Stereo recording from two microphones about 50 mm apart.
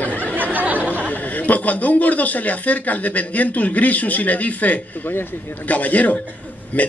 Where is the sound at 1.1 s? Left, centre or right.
Left.